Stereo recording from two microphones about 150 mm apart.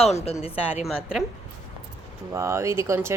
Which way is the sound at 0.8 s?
5° right (ahead or behind).